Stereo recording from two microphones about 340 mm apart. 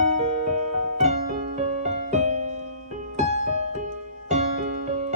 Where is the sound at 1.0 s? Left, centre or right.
Centre.